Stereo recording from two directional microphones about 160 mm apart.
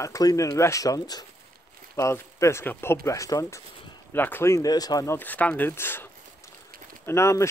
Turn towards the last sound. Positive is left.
turn(degrees=15)  # may be behind; listen again after turning